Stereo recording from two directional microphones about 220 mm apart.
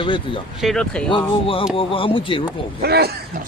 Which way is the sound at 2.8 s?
45° right (ahead or behind).